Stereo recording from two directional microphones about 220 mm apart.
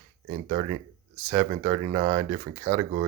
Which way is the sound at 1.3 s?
35° right (ahead or behind).